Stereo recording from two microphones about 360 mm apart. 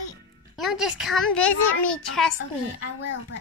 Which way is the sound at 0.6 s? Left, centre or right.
Centre.